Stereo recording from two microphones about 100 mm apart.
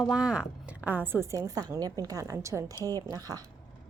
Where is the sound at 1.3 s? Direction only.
35° right (ahead or behind).